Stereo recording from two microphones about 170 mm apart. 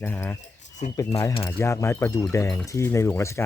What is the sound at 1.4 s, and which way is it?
Speech, 15° left (ahead or behind).